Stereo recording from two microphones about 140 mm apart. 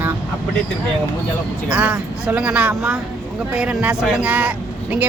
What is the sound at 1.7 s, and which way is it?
Speech, 10° right (ahead or behind).